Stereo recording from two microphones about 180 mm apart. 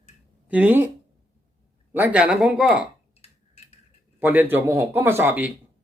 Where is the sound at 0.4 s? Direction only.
10° right (ahead or behind).